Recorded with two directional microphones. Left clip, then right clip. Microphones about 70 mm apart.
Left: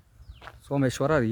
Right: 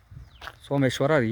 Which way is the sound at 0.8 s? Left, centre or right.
Centre.